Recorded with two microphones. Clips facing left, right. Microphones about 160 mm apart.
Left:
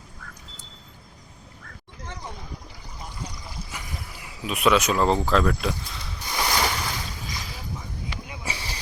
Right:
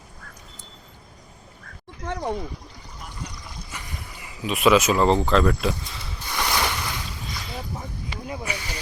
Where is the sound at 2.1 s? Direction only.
60° right (ahead or behind).